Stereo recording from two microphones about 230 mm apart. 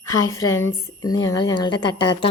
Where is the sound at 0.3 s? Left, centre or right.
Centre.